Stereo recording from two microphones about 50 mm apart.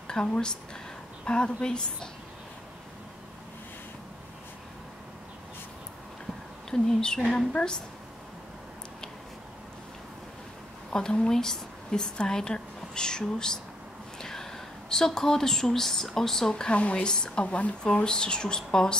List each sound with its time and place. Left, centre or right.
0.2 s speech: centre
6.7 s speech: centre
10.9 s a woman's voice: centre